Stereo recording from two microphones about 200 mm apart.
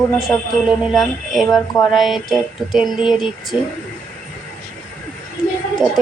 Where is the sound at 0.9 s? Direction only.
Centre (ahead or behind).